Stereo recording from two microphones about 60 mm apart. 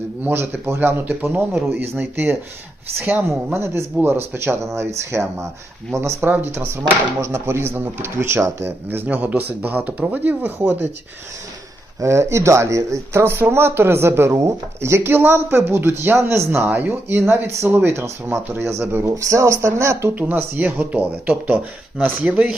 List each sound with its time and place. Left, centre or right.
0.3 s speech: right
3.2 s speech: right
4.0 s speech: right
4.4 s speech: right
9.0 s speech: right
11.9 s speech: right
13.2 s speech: right
16.6 s speech: right
19.1 s speech: right
20.1 s speech: right